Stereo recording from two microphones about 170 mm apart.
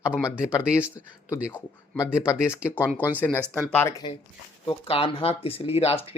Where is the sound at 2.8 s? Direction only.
10° right (ahead or behind).